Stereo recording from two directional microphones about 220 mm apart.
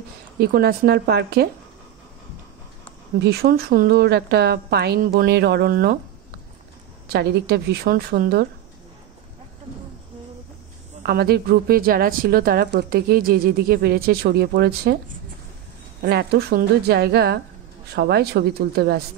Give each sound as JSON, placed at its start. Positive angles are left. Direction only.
{"t": 0.4, "sound": "a woman's voice", "side_deg": -45}
{"t": 3.2, "sound": "a woman's voice", "side_deg": -45}
{"t": 7.1, "sound": "a woman's voice", "side_deg": -45}
{"t": 11.0, "sound": "a woman's voice", "side_deg": -45}
{"t": 16.0, "sound": "a woman's voice", "side_deg": -45}